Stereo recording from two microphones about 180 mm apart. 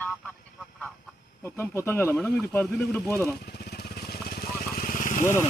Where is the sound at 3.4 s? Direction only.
60° left (ahead or behind).